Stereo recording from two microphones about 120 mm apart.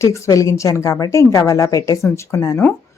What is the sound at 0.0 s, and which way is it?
Speech, 25° left (ahead or behind).